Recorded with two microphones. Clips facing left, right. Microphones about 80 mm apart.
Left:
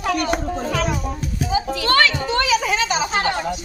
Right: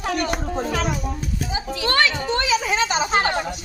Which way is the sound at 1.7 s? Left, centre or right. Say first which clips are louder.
Left 1 dB; centre.